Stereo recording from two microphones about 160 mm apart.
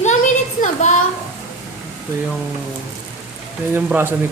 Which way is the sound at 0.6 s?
50° left (ahead or behind).